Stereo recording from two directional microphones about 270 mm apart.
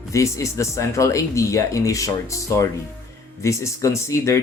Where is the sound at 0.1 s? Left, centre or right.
Centre.